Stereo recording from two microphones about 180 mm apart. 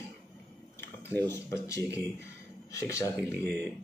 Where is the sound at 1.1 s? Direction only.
10° left (ahead or behind).